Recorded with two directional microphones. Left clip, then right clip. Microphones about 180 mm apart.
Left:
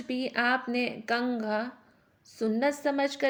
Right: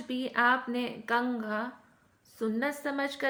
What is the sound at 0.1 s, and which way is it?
A woman's voice, 20° left (ahead or behind).